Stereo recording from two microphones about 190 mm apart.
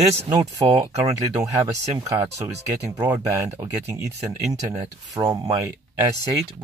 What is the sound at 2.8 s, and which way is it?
Speech, 15° right (ahead or behind).